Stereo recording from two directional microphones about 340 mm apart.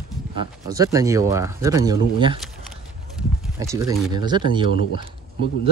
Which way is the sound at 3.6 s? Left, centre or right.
Centre.